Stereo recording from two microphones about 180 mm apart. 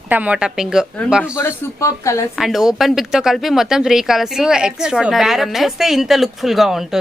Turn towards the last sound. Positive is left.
turn(degrees=0)  # may be behind; listen again after turning